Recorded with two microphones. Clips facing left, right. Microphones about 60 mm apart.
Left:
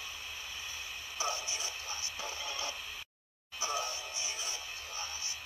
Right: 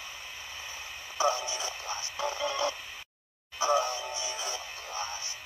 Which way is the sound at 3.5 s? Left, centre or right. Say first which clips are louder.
Right 10 dB; right.